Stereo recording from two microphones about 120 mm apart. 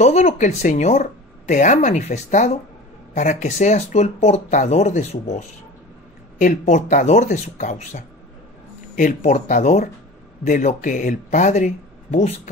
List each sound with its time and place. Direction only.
0.0 s speech: 70° left (ahead or behind)
1.5 s a woman's voice: 90° left; by 5.4 s 70° left (ahead or behind)
6.3 s speech: 85° left